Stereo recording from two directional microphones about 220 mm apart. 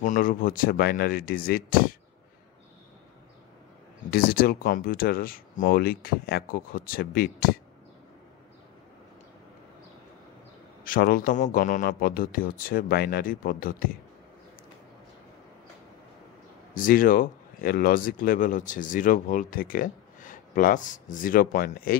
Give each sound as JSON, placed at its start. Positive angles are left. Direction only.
{"t": 0.0, "sound": "speech", "side_deg": 35}
{"t": 4.1, "sound": "speech", "side_deg": 40}
{"t": 10.8, "sound": "speech", "side_deg": 40}
{"t": 16.7, "sound": "speech", "side_deg": 40}